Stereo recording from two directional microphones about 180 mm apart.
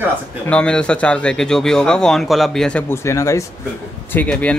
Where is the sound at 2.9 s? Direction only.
15° left (ahead or behind).